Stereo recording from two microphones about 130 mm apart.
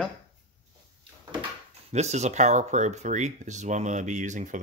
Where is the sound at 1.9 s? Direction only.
60° right (ahead or behind).